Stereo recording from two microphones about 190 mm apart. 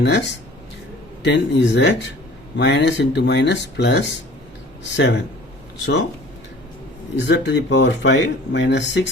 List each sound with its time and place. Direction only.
0.0 s speech: 65° left (ahead or behind)
7.3 s speech: 65° left (ahead or behind)